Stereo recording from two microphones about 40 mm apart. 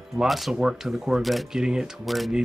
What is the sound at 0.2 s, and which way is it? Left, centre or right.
Speech, right.